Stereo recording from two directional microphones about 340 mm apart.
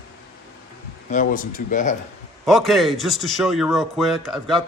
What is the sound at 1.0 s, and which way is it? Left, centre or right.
Speech, left.